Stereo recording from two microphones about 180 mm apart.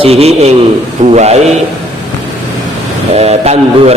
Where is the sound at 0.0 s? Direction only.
35° right (ahead or behind).